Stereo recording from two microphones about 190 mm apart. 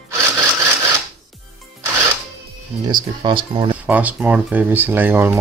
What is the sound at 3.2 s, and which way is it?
Speech, 25° right (ahead or behind).